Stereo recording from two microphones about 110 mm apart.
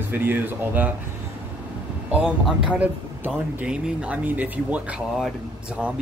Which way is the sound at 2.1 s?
10° right (ahead or behind).